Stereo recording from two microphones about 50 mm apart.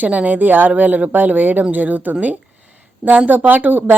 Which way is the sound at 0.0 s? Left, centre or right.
Right.